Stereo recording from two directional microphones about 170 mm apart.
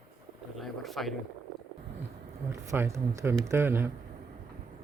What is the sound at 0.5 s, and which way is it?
Speech, centre (ahead or behind).